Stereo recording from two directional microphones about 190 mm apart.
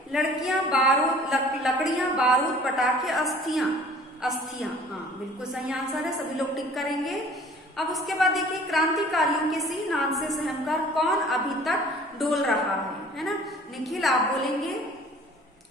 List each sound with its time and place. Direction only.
0.1 s a woman's voice: centre (ahead or behind)
13.8 s a woman's voice: centre (ahead or behind)